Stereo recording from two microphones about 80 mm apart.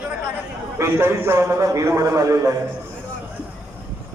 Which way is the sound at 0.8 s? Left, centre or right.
Right.